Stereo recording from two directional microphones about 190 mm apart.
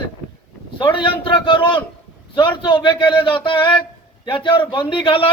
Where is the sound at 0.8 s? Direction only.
25° left (ahead or behind).